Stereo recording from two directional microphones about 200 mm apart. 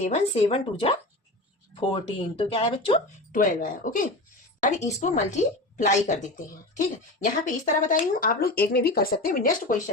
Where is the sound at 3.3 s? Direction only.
45° left (ahead or behind).